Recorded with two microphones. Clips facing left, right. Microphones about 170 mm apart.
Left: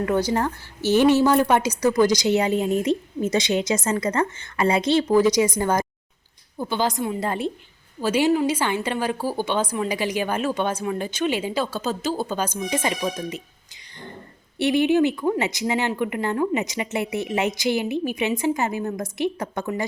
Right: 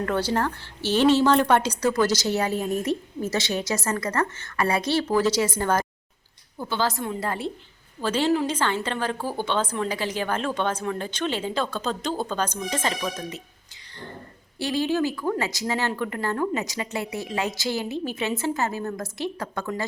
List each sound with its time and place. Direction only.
0.0 s a woman's voice: 10° left (ahead or behind)
14.6 s a woman's voice: 20° left (ahead or behind)